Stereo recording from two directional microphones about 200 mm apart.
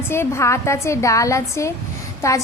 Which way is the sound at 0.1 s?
15° left (ahead or behind).